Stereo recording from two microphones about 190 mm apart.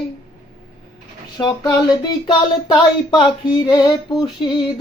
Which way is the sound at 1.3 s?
20° left (ahead or behind).